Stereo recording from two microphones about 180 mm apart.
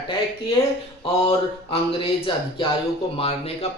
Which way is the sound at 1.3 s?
30° left (ahead or behind).